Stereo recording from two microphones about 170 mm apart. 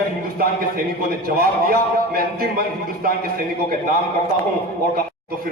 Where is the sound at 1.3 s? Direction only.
60° right (ahead or behind).